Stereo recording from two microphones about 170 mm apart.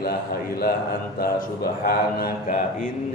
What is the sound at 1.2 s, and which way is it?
A man's voice, 65° left (ahead or behind).